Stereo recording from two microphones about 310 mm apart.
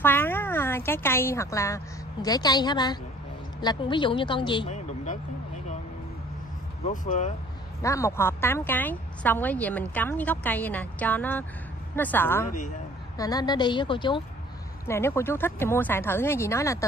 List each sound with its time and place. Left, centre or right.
0.0 s a woman's voice: centre; by 5.2 s left
6.9 s speech: left
7.8 s a woman's voice: centre